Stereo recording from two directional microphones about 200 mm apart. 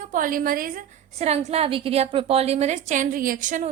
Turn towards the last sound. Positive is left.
turn(degrees=-40)  # may be behind; listen again after turning